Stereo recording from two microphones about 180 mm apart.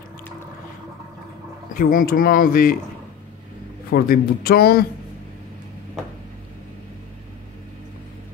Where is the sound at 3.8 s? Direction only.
55° left (ahead or behind).